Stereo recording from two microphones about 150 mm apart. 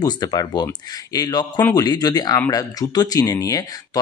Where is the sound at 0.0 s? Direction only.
25° left (ahead or behind).